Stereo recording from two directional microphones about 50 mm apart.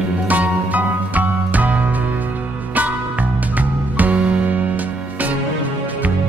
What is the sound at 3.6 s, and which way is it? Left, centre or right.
Music, right.